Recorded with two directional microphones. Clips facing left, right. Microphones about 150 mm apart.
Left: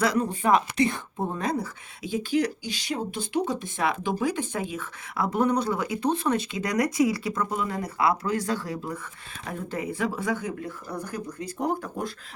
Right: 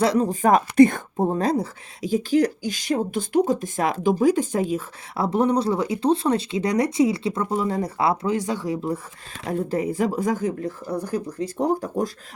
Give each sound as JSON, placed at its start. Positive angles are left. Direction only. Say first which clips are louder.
{"t": 0.0, "sound": "speech", "louder": "right 5 dB", "side_deg": -30}
{"t": 9.5, "sound": "speech", "louder": "right 8 dB", "side_deg": -35}